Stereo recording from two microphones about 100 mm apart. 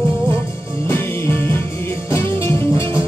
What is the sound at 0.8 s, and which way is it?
Music, 25° left (ahead or behind).